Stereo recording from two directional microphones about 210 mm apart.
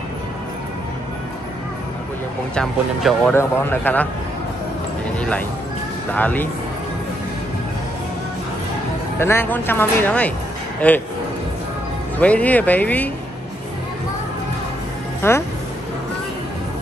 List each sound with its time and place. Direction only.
2.5 s speech: centre (ahead or behind)
6.1 s speech: 10° left (ahead or behind)
9.2 s speech: 10° left (ahead or behind)
12.2 s speech: 5° left (ahead or behind)
15.2 s speech: 10° left (ahead or behind)